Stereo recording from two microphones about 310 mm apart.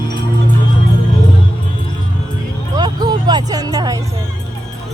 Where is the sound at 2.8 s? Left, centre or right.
Centre.